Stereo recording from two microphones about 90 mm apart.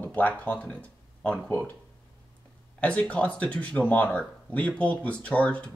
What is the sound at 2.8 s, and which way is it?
Speech, 15° left (ahead or behind).